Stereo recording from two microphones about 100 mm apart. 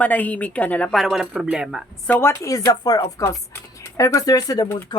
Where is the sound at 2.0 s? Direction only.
20° left (ahead or behind).